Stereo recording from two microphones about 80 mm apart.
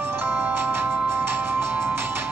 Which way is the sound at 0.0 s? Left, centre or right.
Right.